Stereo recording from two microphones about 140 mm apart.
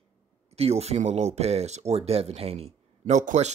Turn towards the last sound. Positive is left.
turn(degrees=-55)  # may be behind; listen again after turning